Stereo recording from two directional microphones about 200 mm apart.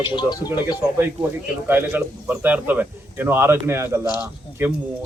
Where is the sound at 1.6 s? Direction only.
10° right (ahead or behind).